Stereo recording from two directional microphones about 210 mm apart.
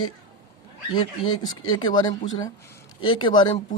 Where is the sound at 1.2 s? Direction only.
80° left.